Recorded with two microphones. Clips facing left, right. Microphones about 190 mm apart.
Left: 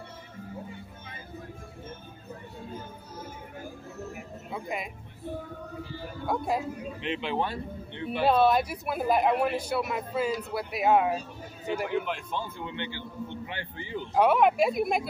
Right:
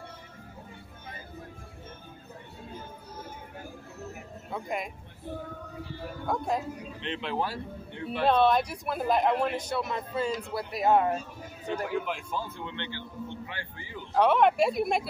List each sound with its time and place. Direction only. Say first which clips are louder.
4.5 s speech: right 1 dB; 5° left (ahead or behind)
6.2 s speech: left 1 dB; 5° left (ahead or behind)
11.9 s a man's voice: left 1 dB; 5° right (ahead or behind); by 14.0 s 20° left (ahead or behind)
14.1 s speech: even; 5° left (ahead or behind)